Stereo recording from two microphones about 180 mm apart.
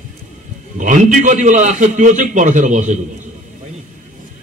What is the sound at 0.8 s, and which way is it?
A man's voice, 45° right (ahead or behind).